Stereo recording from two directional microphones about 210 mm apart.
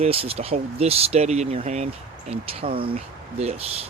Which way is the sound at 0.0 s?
30° right (ahead or behind).